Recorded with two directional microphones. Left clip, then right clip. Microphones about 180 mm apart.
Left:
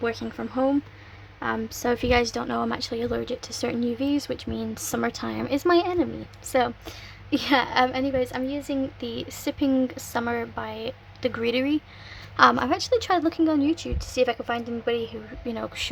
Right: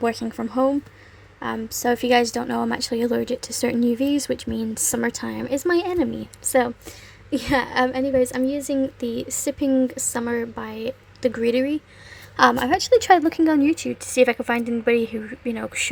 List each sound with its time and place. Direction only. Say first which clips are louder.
0.0 s a woman's voice: right 4 dB; 20° right (ahead or behind)
1.4 s a woman's voice: right 1 dB; 5° right (ahead or behind)
13.0 s a woman's voice: right 6 dB; 20° right (ahead or behind)
15.4 s a woman's voice: right 2 dB; 10° right (ahead or behind)